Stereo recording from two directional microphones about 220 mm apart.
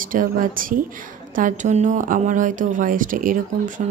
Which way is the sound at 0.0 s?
40° right (ahead or behind).